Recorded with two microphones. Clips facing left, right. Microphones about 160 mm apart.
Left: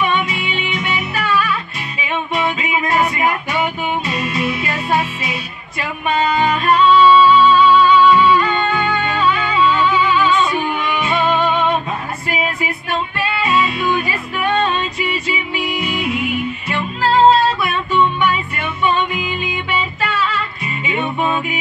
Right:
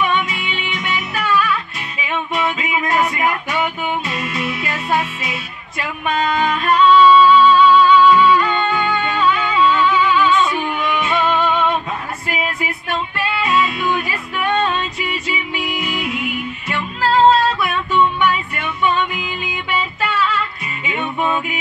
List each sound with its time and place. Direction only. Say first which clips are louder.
0.0 s music: left 1 dB; centre (ahead or behind)
13.4 s music: left 1 dB; centre (ahead or behind)
19.1 s music: left 3 dB; 5° right (ahead or behind)